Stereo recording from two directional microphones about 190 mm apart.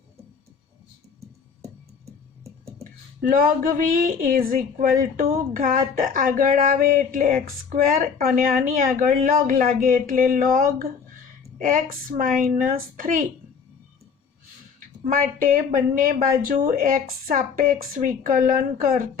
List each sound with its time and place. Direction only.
2.4 s music: 15° right (ahead or behind)
3.2 s speech: 50° right (ahead or behind)
15.0 s speech: 45° right (ahead or behind)